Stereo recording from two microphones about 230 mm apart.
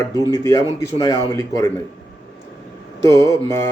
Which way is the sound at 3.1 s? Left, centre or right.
Centre.